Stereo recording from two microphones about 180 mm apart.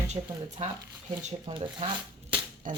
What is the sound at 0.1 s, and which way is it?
Speech, 40° right (ahead or behind).